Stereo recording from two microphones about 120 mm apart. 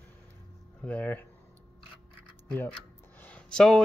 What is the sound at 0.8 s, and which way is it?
Speech, 10° left (ahead or behind).